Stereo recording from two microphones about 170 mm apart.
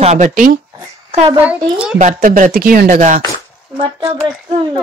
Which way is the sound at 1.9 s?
50° right (ahead or behind).